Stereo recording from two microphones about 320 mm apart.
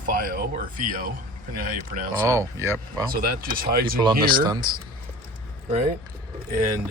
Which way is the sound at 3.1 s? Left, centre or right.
Right.